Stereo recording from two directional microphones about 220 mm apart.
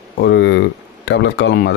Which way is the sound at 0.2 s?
50° left (ahead or behind).